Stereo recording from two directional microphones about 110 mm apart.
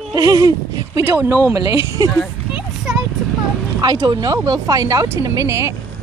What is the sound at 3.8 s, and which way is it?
Speech, 35° right (ahead or behind).